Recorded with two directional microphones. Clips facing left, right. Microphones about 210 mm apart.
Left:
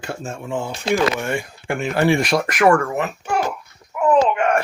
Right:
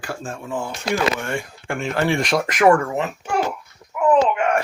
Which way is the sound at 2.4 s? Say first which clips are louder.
Right 2 dB; 20° right (ahead or behind).